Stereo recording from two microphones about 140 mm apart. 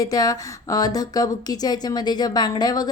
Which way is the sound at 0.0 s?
25° left (ahead or behind).